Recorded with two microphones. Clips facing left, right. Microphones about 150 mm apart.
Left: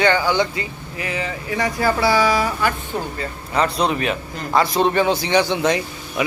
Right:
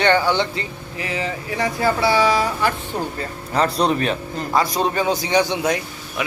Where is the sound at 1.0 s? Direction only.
30° right (ahead or behind).